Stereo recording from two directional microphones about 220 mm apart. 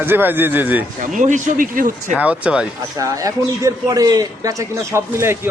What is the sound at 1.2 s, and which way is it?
Speech, 35° right (ahead or behind).